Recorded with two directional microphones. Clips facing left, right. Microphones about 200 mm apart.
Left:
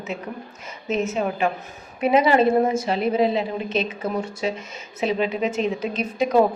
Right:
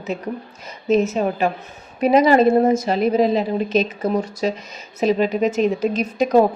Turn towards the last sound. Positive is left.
turn(degrees=-45)  # may be behind; listen again after turning